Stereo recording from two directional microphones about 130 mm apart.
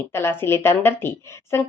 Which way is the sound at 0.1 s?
20° left (ahead or behind).